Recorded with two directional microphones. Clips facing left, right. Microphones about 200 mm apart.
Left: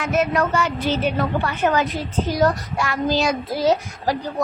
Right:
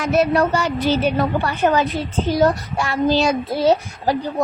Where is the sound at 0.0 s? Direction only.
35° right (ahead or behind).